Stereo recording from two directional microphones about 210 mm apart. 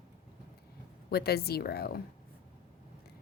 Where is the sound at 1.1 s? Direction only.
50° left (ahead or behind).